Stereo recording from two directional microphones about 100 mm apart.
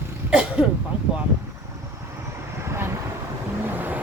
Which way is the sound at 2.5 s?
25° right (ahead or behind).